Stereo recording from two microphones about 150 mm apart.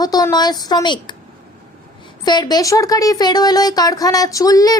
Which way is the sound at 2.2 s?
30° left (ahead or behind).